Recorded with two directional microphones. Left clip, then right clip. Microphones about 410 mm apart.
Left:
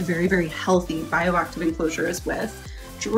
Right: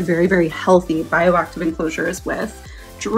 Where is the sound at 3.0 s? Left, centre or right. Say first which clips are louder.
Right 4 dB; centre.